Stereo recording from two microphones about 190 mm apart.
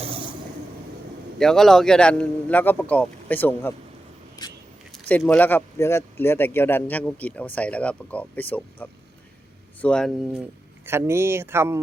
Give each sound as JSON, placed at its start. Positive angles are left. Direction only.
{"t": 0.0, "sound": "vehicle", "side_deg": -30}
{"t": 1.4, "sound": "speech", "side_deg": 0}
{"t": 5.0, "sound": "speech", "side_deg": 5}
{"t": 10.4, "sound": "speech", "side_deg": -15}